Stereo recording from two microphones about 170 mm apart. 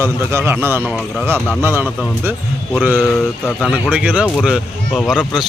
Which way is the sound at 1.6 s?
15° right (ahead or behind).